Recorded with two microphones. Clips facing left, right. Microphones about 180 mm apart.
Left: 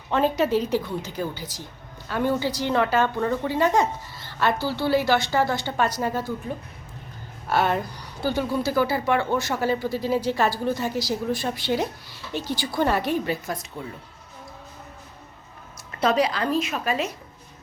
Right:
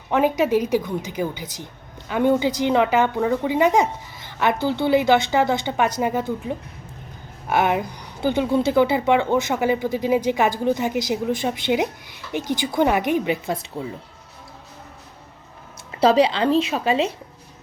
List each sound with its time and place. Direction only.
0.1 s a woman's voice: 15° right (ahead or behind)
16.0 s a woman's voice: 30° right (ahead or behind)